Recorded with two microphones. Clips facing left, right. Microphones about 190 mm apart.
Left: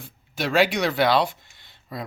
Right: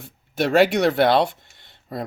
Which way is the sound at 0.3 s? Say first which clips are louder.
Right 4 dB; 60° right (ahead or behind).